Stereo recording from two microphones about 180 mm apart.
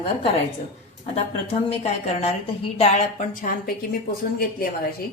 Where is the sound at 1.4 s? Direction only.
35° left (ahead or behind); by 4.7 s 55° left (ahead or behind).